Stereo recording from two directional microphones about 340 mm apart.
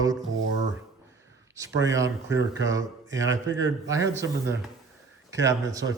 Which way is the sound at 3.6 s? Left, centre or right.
Centre.